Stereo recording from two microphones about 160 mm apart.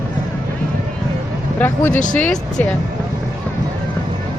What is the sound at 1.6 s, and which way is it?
Speech, 10° left (ahead or behind).